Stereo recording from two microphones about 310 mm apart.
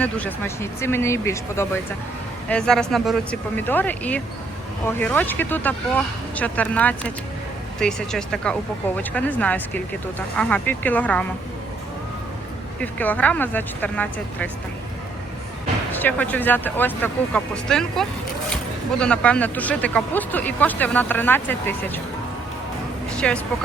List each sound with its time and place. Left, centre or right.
0.0 s speech: centre
12.8 s speech: centre
16.0 s speech: centre
23.1 s speech: centre